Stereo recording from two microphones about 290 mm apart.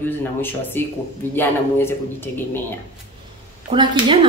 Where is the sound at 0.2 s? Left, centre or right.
Centre.